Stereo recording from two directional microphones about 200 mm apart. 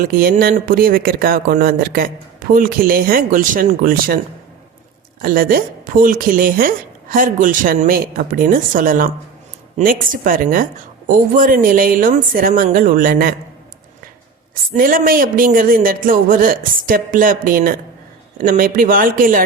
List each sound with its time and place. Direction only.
0.0 s speech: 45° right (ahead or behind)
5.2 s speech: 45° right (ahead or behind)
14.7 s speech: 45° right (ahead or behind)